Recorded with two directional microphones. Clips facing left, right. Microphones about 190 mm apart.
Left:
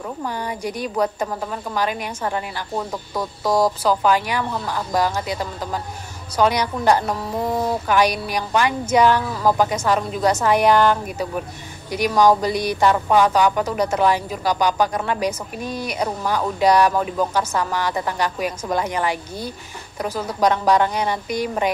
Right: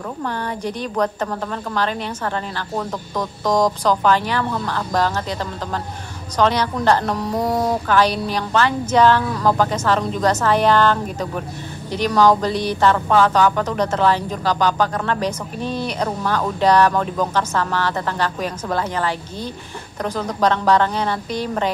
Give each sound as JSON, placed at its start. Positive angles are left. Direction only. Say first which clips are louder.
{"t": 0.2, "sound": "speech", "louder": "right 2 dB", "side_deg": 10}